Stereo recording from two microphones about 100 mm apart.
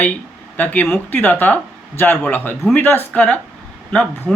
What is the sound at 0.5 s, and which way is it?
A woman's voice, 15° left (ahead or behind).